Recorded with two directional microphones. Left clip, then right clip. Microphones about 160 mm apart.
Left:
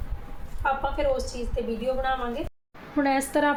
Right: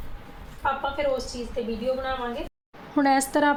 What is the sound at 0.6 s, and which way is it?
A woman's voice, 20° left (ahead or behind).